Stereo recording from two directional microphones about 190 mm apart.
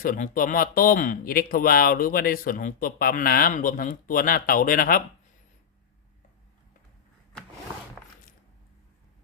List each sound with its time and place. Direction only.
0.0 s speech: 45° left (ahead or behind)